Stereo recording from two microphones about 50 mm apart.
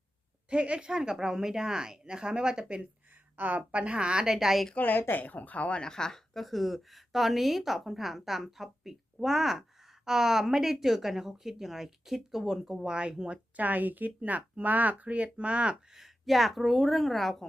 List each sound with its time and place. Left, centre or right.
0.5 s a woman's voice: right
3.3 s a woman's voice: right
3.7 s a woman's voice: right; by 4.6 s centre
4.8 s a woman's voice: left
5.8 s a woman's voice: centre; by 13.4 s right
13.6 s speech: right
16.0 s a woman's voice: centre